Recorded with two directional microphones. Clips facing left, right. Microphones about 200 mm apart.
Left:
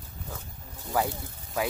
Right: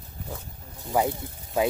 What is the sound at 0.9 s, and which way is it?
Speech, 20° right (ahead or behind).